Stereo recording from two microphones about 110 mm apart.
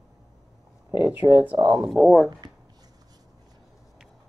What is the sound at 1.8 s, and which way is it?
Speech, 5° right (ahead or behind).